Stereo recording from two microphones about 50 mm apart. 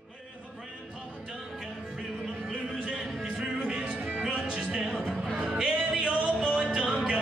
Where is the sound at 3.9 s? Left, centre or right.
Right.